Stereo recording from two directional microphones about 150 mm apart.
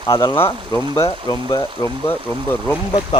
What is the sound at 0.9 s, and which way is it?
Speech, 20° left (ahead or behind).